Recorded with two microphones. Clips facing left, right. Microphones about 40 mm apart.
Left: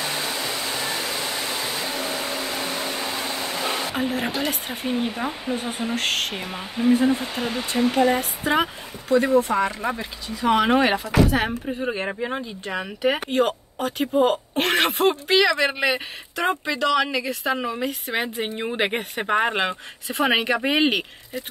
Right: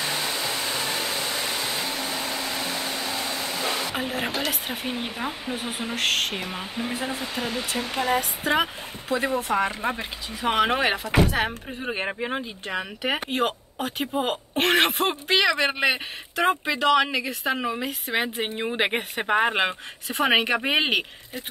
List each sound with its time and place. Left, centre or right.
0.0 s hair dryer: centre
1.1 s a sound: centre
2.7 s vacuum cleaner: centre
3.4 s a sound: centre
3.9 s a woman's voice: centre
9.8 s speech: right
10.7 s a woman's voice: centre
12.1 s speech: centre
12.6 s a woman's voice: centre